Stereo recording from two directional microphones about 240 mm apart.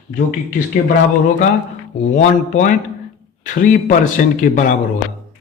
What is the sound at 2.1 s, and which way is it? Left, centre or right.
Speech, left.